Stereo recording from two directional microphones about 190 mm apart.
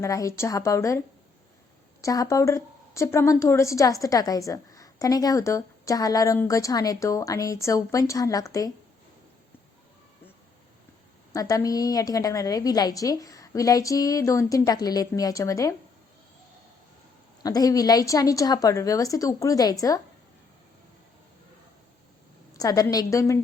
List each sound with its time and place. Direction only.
0.0 s a woman's voice: 15° left (ahead or behind)
2.0 s a woman's voice: 15° left (ahead or behind)
11.3 s a woman's voice: 20° left (ahead or behind)
17.4 s a woman's voice: 20° left (ahead or behind)
22.5 s a woman's voice: 20° left (ahead or behind)